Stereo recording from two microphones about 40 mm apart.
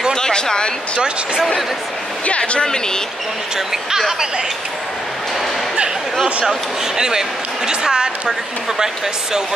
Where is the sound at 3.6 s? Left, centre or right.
Centre.